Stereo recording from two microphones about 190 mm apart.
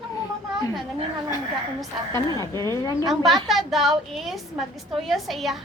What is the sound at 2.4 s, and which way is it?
Speech, 15° left (ahead or behind).